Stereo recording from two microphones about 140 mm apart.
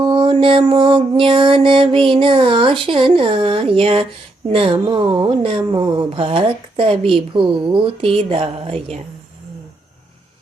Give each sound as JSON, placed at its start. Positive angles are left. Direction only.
{"t": 0.0, "sound": "speech", "side_deg": -35}